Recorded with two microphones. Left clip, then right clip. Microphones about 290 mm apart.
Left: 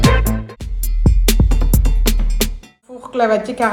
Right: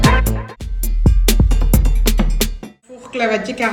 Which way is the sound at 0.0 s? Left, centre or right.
Centre.